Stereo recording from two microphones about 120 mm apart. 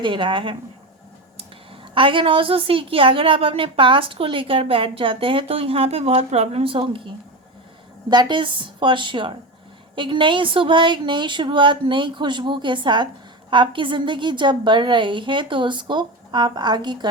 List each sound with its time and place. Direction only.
0.0 s a woman's voice: 45° right (ahead or behind)
8.1 s a woman's voice: 40° right (ahead or behind)